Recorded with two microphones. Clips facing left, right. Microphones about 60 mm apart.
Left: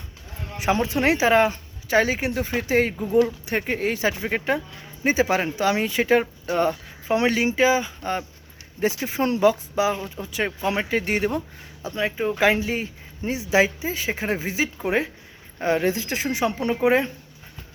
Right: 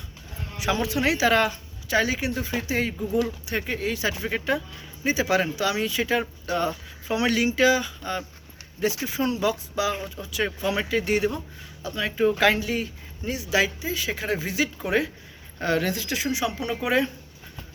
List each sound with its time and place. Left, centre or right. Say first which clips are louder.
0.5 s speech: left 3 dB; left
1.3 s speech: left 6 dB; left
1.9 s speech: left 3 dB; left